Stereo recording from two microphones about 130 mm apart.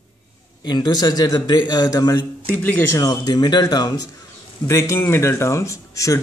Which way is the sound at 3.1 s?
30° left (ahead or behind).